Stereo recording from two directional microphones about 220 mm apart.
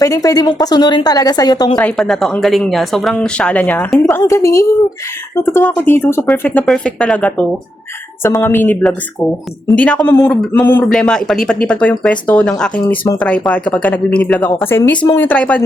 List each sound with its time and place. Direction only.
0.0 s speech: 15° left (ahead or behind)
1.7 s speech: centre (ahead or behind)